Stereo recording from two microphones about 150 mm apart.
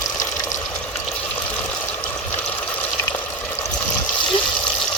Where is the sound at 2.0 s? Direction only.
10° left (ahead or behind).